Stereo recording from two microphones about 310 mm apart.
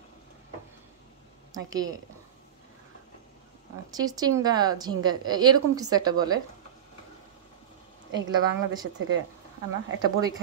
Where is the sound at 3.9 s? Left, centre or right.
Centre.